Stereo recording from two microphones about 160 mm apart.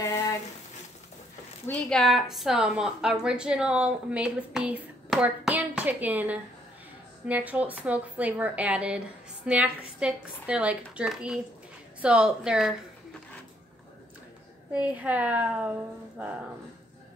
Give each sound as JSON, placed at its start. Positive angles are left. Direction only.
{"t": 0.0, "sound": "a sound", "side_deg": 20}
{"t": 1.7, "sound": "a woman's voice", "side_deg": 5}
{"t": 14.7, "sound": "a woman's voice", "side_deg": -10}